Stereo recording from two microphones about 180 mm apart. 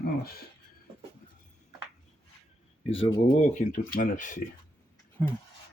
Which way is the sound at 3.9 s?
50° left (ahead or behind).